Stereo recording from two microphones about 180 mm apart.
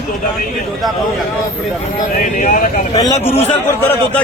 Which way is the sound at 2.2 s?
40° left (ahead or behind).